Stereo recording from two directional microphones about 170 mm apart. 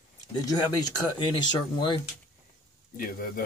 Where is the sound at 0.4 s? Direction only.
25° left (ahead or behind).